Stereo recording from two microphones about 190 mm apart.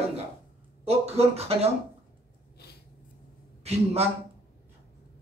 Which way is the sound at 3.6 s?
35° right (ahead or behind).